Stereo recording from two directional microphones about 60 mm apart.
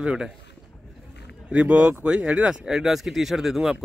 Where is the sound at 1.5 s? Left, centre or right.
Right.